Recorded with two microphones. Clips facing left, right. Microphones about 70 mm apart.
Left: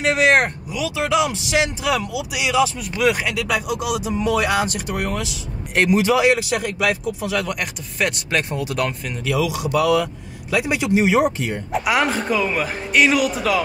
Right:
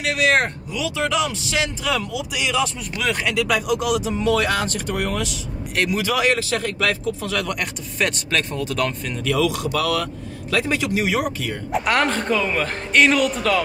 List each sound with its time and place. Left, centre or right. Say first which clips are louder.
0.0 s speech: left 3 dB; left
0.7 s speech: left 2 dB; centre
5.9 s speech: left 4 dB; centre
9.7 s a man's voice: left 4 dB; centre
11.7 s speech: even; centre